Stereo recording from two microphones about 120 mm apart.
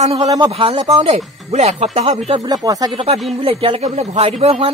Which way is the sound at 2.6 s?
30° right (ahead or behind).